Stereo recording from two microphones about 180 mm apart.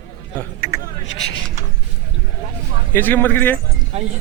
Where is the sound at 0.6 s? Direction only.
75° left (ahead or behind).